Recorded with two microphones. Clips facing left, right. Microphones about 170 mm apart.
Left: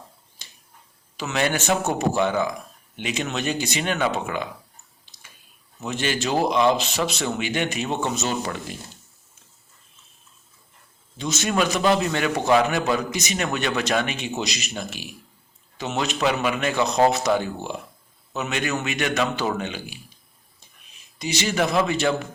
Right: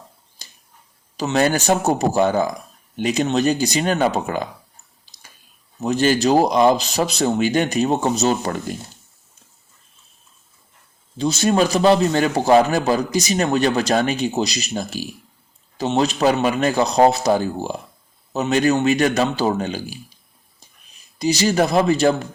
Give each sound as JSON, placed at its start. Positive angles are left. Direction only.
{"t": 0.4, "sound": "finger snapping", "side_deg": -40}
{"t": 1.1, "sound": "a man's voice", "side_deg": -35}
{"t": 5.8, "sound": "a man's voice", "side_deg": -40}
{"t": 11.2, "sound": "a man's voice", "side_deg": -35}
{"t": 21.2, "sound": "a man's voice", "side_deg": -35}